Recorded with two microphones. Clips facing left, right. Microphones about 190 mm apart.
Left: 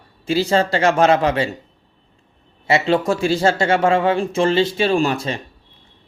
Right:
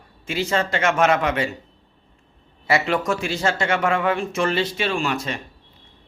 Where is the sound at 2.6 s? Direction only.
25° left (ahead or behind).